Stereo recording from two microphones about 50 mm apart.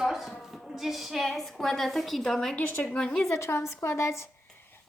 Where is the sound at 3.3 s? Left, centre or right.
Left.